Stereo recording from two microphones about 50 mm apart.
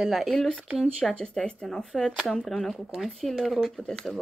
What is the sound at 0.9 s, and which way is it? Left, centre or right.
Speech, centre.